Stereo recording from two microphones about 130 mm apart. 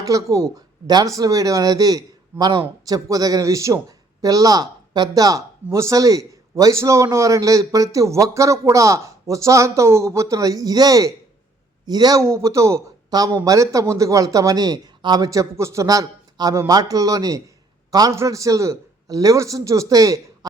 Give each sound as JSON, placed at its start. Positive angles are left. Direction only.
{"t": 0.0, "sound": "speech", "side_deg": -25}